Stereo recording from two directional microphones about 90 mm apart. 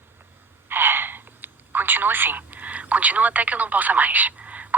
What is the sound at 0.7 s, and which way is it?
Speech, 25° right (ahead or behind).